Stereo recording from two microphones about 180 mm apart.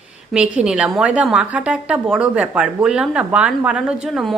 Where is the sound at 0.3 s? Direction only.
5° right (ahead or behind).